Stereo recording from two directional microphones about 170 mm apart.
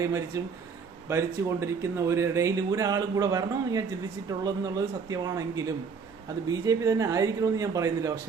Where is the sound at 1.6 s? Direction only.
15° right (ahead or behind).